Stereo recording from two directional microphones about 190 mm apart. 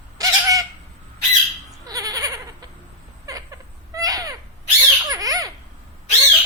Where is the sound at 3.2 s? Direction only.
20° right (ahead or behind).